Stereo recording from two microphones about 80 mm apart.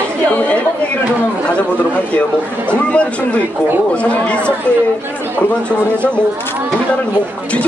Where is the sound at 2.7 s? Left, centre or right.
Centre.